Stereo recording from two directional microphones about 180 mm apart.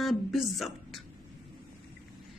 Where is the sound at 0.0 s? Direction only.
Centre (ahead or behind).